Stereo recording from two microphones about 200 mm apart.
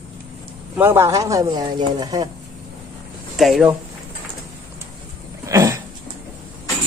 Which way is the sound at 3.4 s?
Centre (ahead or behind).